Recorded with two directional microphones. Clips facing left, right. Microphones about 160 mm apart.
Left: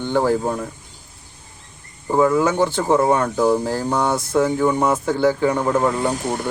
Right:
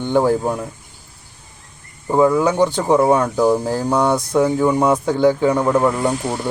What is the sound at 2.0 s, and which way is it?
Speech, 15° right (ahead or behind).